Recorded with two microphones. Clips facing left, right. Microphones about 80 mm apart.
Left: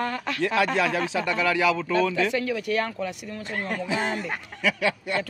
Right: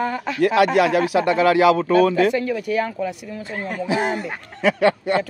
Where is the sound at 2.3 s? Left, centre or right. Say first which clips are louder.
Right 4 dB; centre.